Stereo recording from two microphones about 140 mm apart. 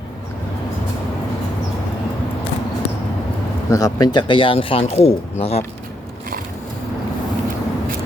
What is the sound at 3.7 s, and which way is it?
Speech, 25° left (ahead or behind).